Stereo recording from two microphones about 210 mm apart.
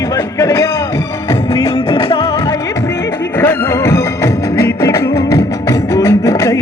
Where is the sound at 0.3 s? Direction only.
15° left (ahead or behind).